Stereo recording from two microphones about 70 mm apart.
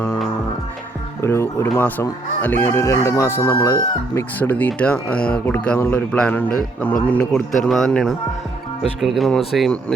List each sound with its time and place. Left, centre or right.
1.2 s speech: left
1.8 s speech: left
2.6 s speech: left
4.4 s speech: left
5.8 s speech: left
6.1 s speech: centre
7.3 s speech: centre